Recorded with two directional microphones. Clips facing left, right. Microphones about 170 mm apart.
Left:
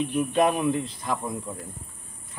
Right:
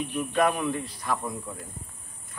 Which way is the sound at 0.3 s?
20° left (ahead or behind).